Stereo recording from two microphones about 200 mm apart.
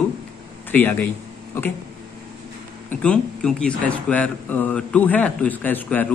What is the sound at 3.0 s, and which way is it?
Speech, 5° left (ahead or behind).